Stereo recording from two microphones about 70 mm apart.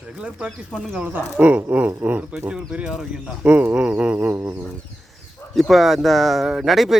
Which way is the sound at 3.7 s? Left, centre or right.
Centre.